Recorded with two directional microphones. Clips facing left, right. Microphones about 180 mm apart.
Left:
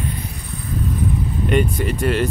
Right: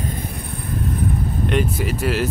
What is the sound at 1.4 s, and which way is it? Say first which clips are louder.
Speech: left 3 dB; centre (ahead or behind).